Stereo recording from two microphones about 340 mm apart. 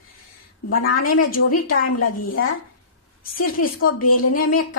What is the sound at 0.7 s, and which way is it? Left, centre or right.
A woman's voice, left.